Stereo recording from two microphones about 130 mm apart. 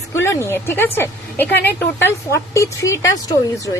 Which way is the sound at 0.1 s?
20° left (ahead or behind).